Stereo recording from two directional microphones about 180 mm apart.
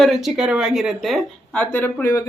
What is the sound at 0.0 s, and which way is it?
A man's voice, centre (ahead or behind).